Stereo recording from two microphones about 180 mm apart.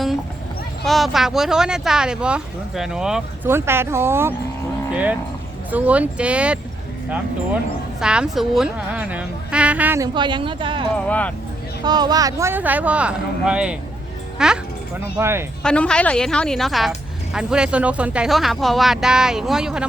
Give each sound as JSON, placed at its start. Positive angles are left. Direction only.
{"t": 0.9, "sound": "a woman's voice", "side_deg": 0}
{"t": 8.0, "sound": "a woman's voice", "side_deg": -5}
{"t": 10.2, "sound": "speech", "side_deg": -25}
{"t": 10.9, "sound": "speech", "side_deg": 10}
{"t": 11.9, "sound": "a woman's voice", "side_deg": -25}
{"t": 15.6, "sound": "speech", "side_deg": 5}